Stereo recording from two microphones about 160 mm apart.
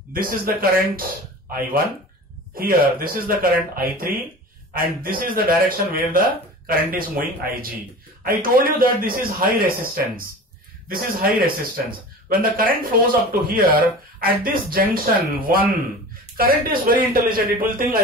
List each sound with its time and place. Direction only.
0.1 s speech: 60° right (ahead or behind)
2.5 s speech: 65° right (ahead or behind)
5.2 s speech: 60° right (ahead or behind)